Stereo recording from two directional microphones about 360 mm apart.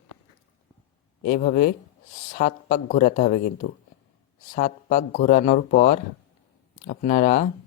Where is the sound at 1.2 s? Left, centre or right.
Left.